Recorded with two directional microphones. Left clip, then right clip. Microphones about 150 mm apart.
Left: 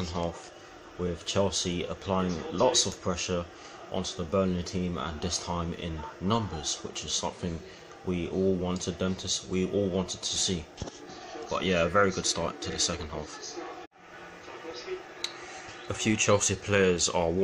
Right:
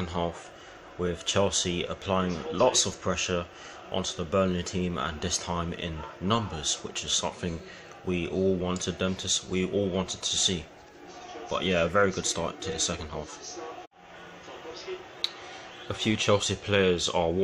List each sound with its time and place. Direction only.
0.1 s speech: 5° right (ahead or behind)
12.5 s speech: 40° right (ahead or behind)
12.9 s speech: centre (ahead or behind)
15.9 s speech: 5° right (ahead or behind)